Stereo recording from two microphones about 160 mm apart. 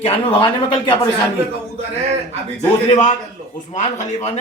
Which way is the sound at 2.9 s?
50° left (ahead or behind).